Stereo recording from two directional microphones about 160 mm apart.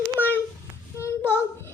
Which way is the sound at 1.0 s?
15° left (ahead or behind).